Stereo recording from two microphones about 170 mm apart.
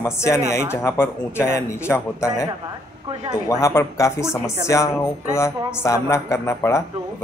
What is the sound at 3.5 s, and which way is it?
A man's voice, 20° left (ahead or behind).